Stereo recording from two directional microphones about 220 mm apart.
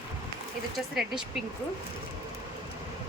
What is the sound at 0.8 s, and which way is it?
Speech, centre (ahead or behind).